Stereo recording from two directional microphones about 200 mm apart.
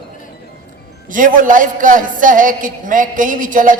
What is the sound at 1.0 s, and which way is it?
A man's voice, 40° right (ahead or behind).